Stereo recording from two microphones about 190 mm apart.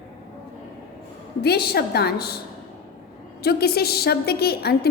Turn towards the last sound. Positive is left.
turn(degrees=55)  # may be behind; listen again after turning